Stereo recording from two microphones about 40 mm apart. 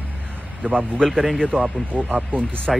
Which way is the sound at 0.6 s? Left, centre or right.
Right.